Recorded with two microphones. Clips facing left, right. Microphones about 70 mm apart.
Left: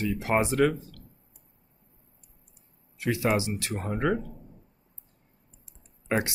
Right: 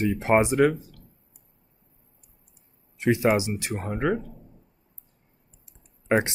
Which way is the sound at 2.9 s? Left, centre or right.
Right.